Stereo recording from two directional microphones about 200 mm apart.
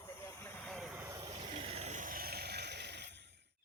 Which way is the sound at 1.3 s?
30° right (ahead or behind).